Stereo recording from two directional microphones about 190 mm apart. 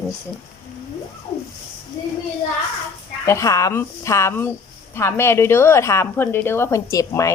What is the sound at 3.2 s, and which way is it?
A woman's voice, 15° left (ahead or behind).